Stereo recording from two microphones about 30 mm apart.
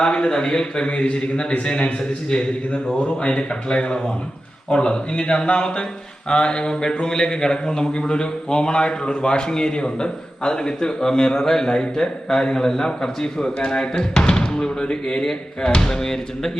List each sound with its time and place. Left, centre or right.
0.0 s speech: left
0.3 s a man's voice: left
2.0 s a man's voice: left
3.0 s a man's voice: left
14.8 s speech: left
15.2 s a man's voice: left